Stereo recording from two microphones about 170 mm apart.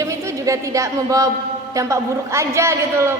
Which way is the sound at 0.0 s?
20° right (ahead or behind).